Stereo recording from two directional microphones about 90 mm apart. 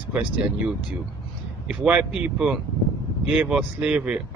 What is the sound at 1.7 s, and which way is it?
Speech, 15° right (ahead or behind).